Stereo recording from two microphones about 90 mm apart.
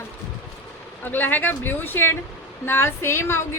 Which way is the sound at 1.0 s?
20° left (ahead or behind).